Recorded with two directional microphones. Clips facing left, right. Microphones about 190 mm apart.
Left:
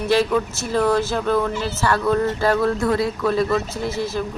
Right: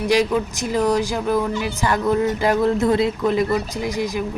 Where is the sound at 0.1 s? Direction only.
15° right (ahead or behind).